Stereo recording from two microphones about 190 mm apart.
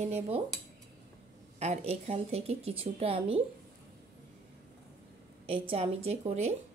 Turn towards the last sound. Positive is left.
turn(degrees=-35)  # may be behind; listen again after turning